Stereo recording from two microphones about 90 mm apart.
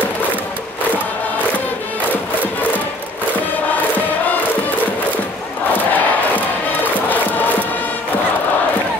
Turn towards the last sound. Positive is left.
turn(degrees=20)  # may be behind; listen again after turning